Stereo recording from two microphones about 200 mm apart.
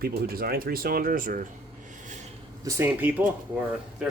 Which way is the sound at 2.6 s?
10° right (ahead or behind).